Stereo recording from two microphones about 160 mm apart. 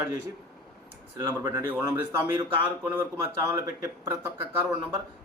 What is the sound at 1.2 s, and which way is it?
Speech, 15° right (ahead or behind).